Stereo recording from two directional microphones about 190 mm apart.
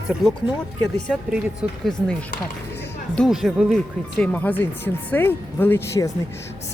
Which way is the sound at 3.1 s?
Centre (ahead or behind).